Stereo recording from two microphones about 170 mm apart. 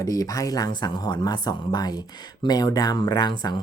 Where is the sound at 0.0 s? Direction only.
20° left (ahead or behind).